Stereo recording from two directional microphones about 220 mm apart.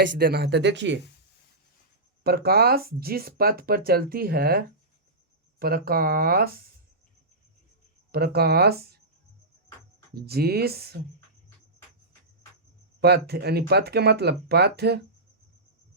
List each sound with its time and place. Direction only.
0.2 s speech: 45° right (ahead or behind)
2.2 s speech: 45° right (ahead or behind)
8.1 s speech: 45° right (ahead or behind)
10.2 s speech: 45° right (ahead or behind)
13.0 s speech: 45° right (ahead or behind)